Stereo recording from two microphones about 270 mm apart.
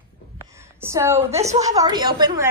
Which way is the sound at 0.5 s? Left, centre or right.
Centre.